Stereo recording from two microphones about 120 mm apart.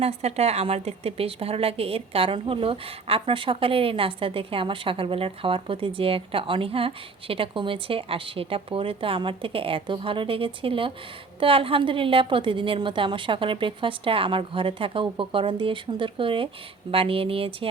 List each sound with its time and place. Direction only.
0.0 s a woman's voice: 60° right (ahead or behind)